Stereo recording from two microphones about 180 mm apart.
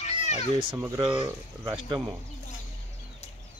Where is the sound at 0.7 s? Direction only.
15° right (ahead or behind).